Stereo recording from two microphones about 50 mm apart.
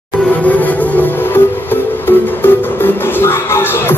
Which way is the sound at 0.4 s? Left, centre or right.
Left.